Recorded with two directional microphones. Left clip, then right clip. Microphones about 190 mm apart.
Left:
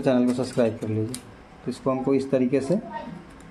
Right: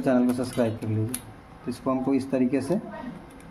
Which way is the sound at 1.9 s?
20° left (ahead or behind).